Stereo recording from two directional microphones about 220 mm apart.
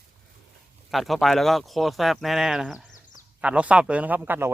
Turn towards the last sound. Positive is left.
turn(degrees=-10)  # may be behind; listen again after turning